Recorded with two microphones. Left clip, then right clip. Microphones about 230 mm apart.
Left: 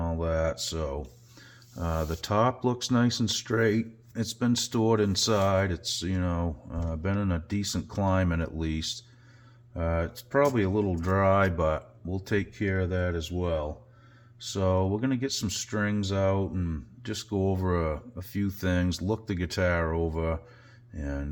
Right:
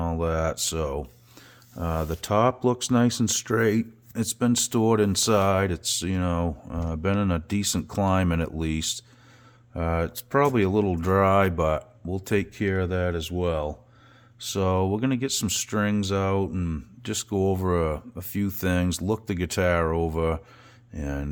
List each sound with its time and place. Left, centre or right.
0.0 s speech: right
1.7 s speech: right